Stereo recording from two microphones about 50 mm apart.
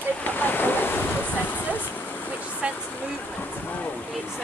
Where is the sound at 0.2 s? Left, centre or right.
Left.